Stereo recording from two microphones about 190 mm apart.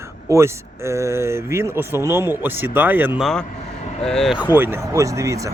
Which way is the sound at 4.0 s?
5° left (ahead or behind).